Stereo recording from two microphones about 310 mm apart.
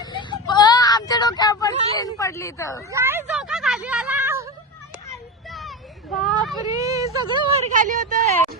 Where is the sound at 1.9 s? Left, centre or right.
Centre.